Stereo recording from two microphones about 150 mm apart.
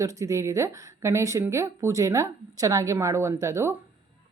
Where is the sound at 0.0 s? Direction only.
20° right (ahead or behind).